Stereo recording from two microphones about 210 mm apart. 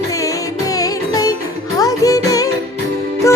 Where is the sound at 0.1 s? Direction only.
15° left (ahead or behind).